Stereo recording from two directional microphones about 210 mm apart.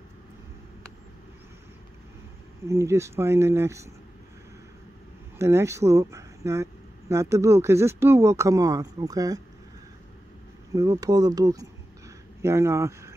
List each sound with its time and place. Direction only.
2.6 s speech: 15° right (ahead or behind)
5.4 s speech: 15° right (ahead or behind)
10.7 s speech: 15° right (ahead or behind)